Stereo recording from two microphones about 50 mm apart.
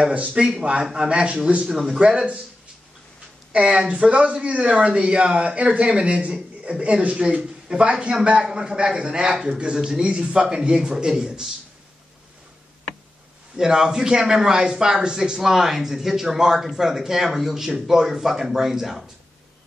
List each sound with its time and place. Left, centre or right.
0.0 s speech: right
3.5 s speech: right
13.6 s speech: centre